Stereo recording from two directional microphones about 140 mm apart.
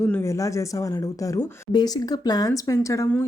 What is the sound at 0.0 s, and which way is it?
Speech, 15° left (ahead or behind).